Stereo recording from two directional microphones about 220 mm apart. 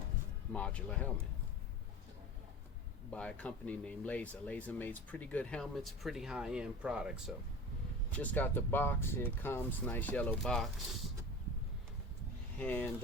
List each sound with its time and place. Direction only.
0.5 s speech: 5° left (ahead or behind)
3.1 s speech: 5° left (ahead or behind)
8.1 s speech: 5° left (ahead or behind)
12.5 s speech: 5° left (ahead or behind)